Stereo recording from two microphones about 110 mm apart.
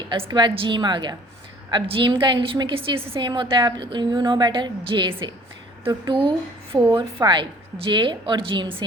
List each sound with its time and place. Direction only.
0.1 s a woman's voice: 45° right (ahead or behind)
7.2 s a woman's voice: 35° right (ahead or behind)
7.9 s a woman's voice: 50° right (ahead or behind)